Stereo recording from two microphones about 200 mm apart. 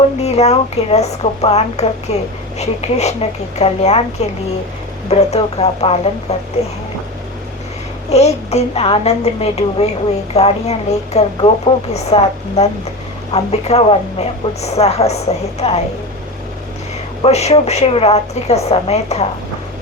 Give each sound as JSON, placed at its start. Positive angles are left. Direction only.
{"t": 0.2, "sound": "a woman's voice", "side_deg": 30}
{"t": 5.0, "sound": "a woman's voice", "side_deg": 30}
{"t": 8.1, "sound": "a woman's voice", "side_deg": 30}
{"t": 17.2, "sound": "a woman's voice", "side_deg": 30}